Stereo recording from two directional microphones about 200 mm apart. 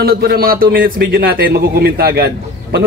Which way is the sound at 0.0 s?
50° right (ahead or behind).